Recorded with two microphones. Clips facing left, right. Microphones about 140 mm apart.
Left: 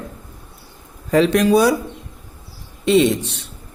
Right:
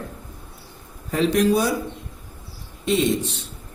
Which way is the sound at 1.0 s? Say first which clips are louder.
Left 4 dB; 85° left.